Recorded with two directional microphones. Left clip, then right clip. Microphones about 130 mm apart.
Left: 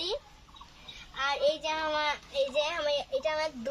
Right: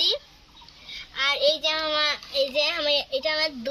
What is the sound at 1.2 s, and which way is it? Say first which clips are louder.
A child's voice: right 6 dB; 25° left (ahead or behind).